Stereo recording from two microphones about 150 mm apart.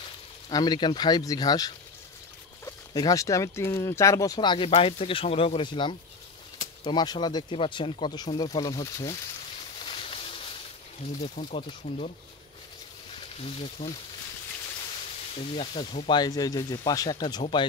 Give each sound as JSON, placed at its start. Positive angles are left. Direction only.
{"t": 0.5, "sound": "speech", "side_deg": 25}
{"t": 9.8, "sound": "a sound", "side_deg": 35}
{"t": 11.1, "sound": "speech", "side_deg": 45}
{"t": 13.6, "sound": "speech", "side_deg": 35}
{"t": 15.3, "sound": "speech", "side_deg": 40}